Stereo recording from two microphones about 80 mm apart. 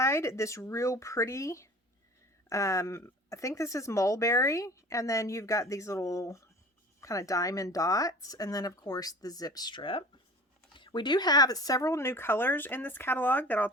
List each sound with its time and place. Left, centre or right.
0.0 s speech: left
10.8 s speech: left